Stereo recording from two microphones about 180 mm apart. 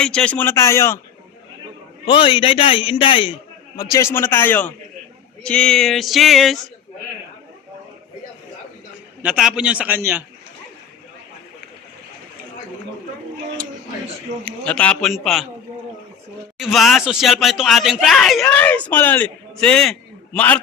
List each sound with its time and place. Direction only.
0.0 s a man's voice: 5° left (ahead or behind)
2.0 s a man's voice: 30° left (ahead or behind)
3.8 s a man's voice: 20° left (ahead or behind); by 6.6 s centre (ahead or behind)
9.2 s a man's voice: 5° right (ahead or behind)
14.4 s speech: 5° left (ahead or behind)
16.6 s speech: centre (ahead or behind)